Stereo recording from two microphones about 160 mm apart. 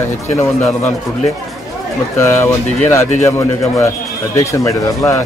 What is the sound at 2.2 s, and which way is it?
Speech, 15° left (ahead or behind).